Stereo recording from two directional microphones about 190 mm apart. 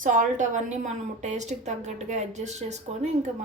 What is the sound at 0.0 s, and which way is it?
A woman's voice, 45° right (ahead or behind).